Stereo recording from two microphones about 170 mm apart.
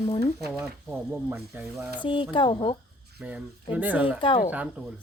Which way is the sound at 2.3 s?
30° left (ahead or behind).